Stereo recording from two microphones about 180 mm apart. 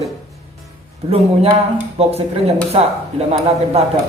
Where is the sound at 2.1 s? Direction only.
35° right (ahead or behind).